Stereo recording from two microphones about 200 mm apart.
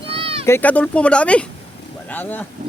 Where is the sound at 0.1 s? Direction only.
30° right (ahead or behind).